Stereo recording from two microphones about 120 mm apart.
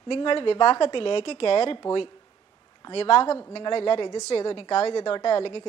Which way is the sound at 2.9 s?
50° left (ahead or behind).